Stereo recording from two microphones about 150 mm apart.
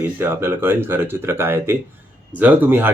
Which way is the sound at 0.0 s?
15° right (ahead or behind).